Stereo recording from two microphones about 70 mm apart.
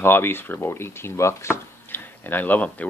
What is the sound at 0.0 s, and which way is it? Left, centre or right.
Chopping, left.